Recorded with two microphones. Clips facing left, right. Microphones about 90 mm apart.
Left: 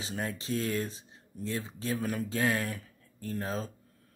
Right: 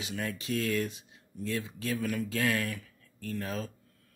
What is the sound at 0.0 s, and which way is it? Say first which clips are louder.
Speech: even; 30° left (ahead or behind).